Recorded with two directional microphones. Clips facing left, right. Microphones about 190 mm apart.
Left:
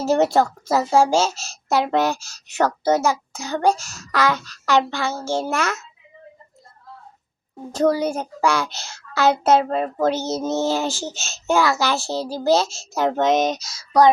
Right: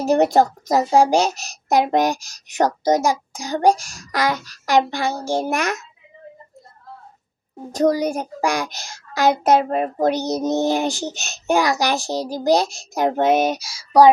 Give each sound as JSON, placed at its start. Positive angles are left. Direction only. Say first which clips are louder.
{"t": 0.0, "sound": "speech", "louder": "right 2 dB", "side_deg": -15}
{"t": 7.9, "sound": "speech", "louder": "right 1 dB", "side_deg": -15}